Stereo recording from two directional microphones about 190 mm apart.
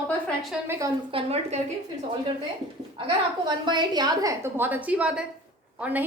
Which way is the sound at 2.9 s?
25° right (ahead or behind).